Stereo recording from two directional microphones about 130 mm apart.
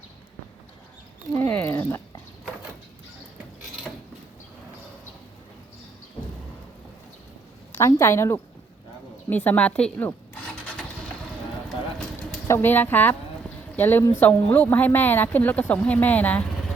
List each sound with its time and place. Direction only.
1.4 s speech: 15° left (ahead or behind)
7.7 s a woman's voice: 20° left (ahead or behind)
9.3 s rub: 15° left (ahead or behind)
11.9 s a sound: 5° left (ahead or behind)
12.5 s speech: 15° left (ahead or behind)